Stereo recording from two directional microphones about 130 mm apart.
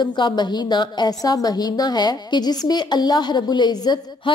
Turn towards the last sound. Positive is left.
turn(degrees=35)  # may be behind; listen again after turning